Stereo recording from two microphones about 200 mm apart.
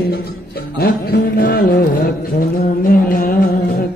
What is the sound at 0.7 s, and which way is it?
Music, 50° left (ahead or behind).